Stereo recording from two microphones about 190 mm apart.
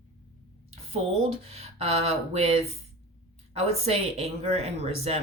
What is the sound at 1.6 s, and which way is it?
Speech, 30° right (ahead or behind).